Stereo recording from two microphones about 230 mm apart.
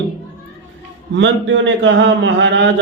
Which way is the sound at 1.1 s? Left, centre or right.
Right.